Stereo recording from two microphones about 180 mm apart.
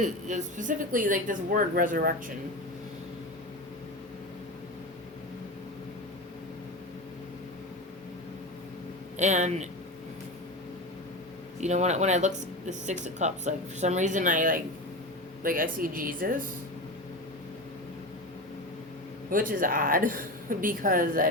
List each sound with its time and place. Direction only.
0.0 s speech: 40° right (ahead or behind)
9.1 s speech: 40° right (ahead or behind)
11.6 s speech: 40° right (ahead or behind)
19.3 s speech: 50° right (ahead or behind)